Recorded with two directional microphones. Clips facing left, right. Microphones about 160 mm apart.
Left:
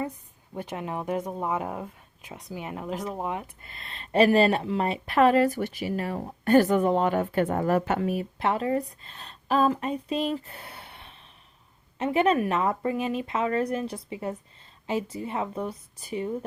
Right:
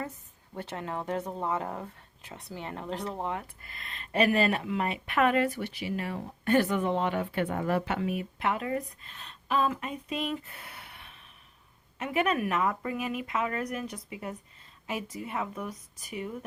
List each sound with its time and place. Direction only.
0.5 s speech: 15° left (ahead or behind)